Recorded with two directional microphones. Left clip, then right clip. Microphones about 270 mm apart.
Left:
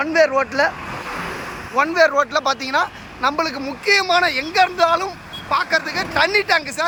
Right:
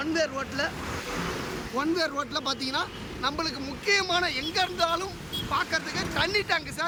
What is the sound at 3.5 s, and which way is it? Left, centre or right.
Speech, centre.